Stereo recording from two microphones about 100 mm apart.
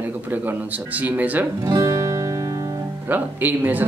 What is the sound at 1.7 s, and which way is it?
Music, 35° right (ahead or behind).